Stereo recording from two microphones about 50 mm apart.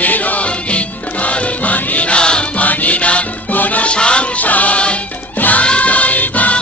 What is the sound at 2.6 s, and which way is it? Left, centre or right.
Music, left.